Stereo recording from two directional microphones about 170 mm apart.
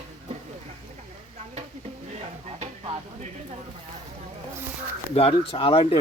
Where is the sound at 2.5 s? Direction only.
35° right (ahead or behind).